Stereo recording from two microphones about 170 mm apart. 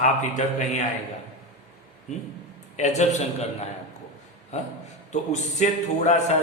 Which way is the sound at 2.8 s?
45° left (ahead or behind).